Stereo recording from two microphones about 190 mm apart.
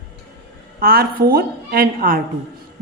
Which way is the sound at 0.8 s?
50° right (ahead or behind).